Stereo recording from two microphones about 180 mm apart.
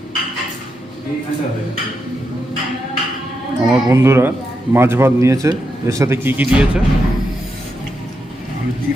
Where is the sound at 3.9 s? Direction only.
15° right (ahead or behind).